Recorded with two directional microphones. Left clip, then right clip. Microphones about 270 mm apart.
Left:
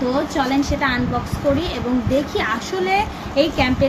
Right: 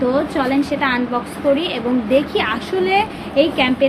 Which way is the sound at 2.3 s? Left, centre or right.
Centre.